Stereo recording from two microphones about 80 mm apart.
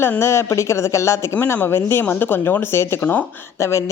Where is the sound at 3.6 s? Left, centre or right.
Left.